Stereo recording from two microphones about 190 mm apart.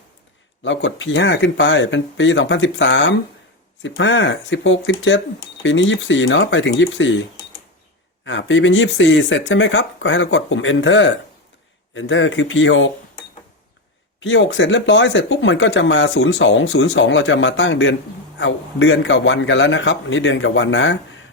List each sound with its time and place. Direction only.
0.6 s speech: 80° left
14.2 s speech: 75° left (ahead or behind)